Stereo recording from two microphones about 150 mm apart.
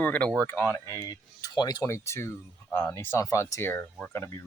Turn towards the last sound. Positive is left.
turn(degrees=10)  # may be behind; listen again after turning